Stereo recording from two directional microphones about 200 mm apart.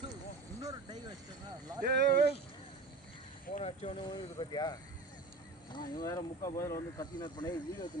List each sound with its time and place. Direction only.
0.6 s vehicle: 20° right (ahead or behind)
1.8 s a sound: 55° right (ahead or behind)
3.5 s speech: 30° left (ahead or behind)